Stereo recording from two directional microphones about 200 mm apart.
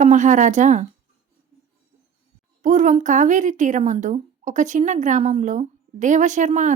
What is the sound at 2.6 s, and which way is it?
A woman's voice, 35° right (ahead or behind).